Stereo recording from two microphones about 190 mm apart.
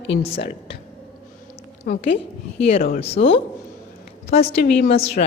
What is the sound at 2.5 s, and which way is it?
Speech, 30° left (ahead or behind).